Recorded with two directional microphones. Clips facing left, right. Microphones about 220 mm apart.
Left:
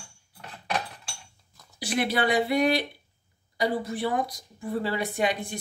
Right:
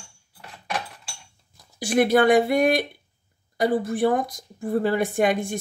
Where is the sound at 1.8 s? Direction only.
50° right (ahead or behind).